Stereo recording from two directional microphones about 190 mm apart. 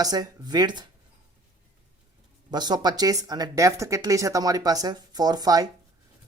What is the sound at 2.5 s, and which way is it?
Speech, 20° right (ahead or behind).